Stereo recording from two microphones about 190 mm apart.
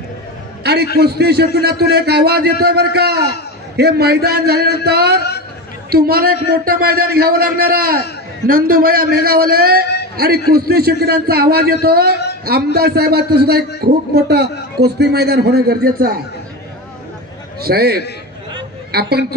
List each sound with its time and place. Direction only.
0.7 s a sound: 60° right (ahead or behind)
1.0 s a man's voice: 60° right (ahead or behind)
17.6 s a man's voice: 55° right (ahead or behind)